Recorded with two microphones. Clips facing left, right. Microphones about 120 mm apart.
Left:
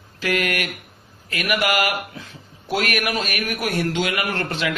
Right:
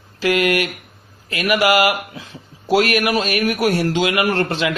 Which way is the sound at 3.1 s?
25° right (ahead or behind).